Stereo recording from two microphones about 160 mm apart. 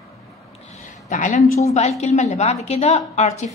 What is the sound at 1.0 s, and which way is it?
A woman's voice, 50° left (ahead or behind).